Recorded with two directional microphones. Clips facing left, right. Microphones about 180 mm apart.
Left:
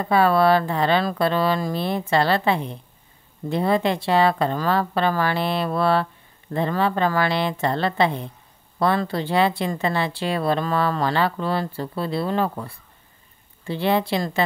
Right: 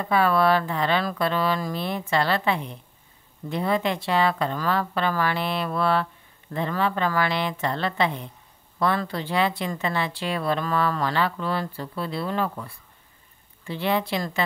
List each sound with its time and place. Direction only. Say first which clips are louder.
0.0 s a woman's voice: left 3 dB; 30° left (ahead or behind)